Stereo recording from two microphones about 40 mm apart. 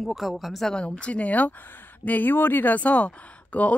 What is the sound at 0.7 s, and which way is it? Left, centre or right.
Speech, left.